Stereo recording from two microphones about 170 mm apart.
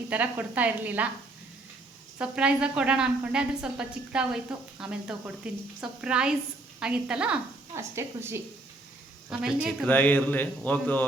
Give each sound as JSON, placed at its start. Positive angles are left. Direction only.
{"t": 0.1, "sound": "speech", "side_deg": -10}
{"t": 2.1, "sound": "a woman's voice", "side_deg": -5}
{"t": 9.3, "sound": "a woman's voice", "side_deg": -5}
{"t": 9.9, "sound": "a man's voice", "side_deg": 10}